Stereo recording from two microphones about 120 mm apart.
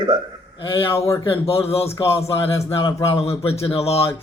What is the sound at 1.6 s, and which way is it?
A man's voice, 55° left (ahead or behind).